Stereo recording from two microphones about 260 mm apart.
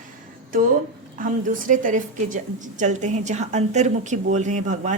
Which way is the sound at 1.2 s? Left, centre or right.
Right.